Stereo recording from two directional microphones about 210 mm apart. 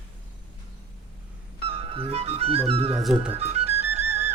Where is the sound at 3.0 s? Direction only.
Centre (ahead or behind).